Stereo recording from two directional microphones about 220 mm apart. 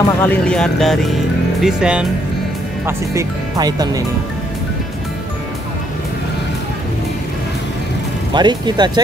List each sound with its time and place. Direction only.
0.2 s speech: 5° left (ahead or behind)
2.9 s speech: 15° right (ahead or behind)
8.3 s speech: 20° right (ahead or behind)